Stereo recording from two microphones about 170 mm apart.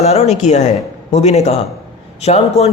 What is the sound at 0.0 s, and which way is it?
A man's voice, 40° left (ahead or behind).